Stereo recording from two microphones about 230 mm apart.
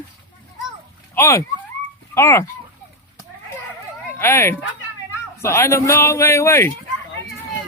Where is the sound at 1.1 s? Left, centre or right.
Centre.